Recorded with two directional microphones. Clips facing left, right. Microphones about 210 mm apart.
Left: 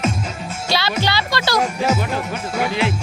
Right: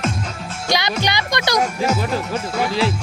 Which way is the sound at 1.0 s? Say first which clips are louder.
Left 1 dB; 15° right (ahead or behind).